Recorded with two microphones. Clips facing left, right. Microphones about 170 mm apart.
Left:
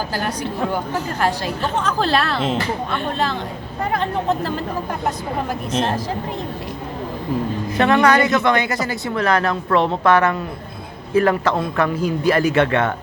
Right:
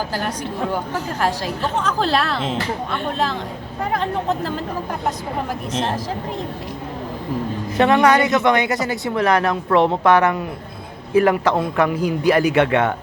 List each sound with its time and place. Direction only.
0.1 s a woman's voice: centre (ahead or behind)
7.8 s a woman's voice: 15° right (ahead or behind)